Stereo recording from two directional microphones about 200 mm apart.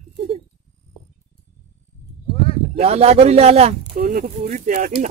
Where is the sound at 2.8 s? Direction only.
30° right (ahead or behind).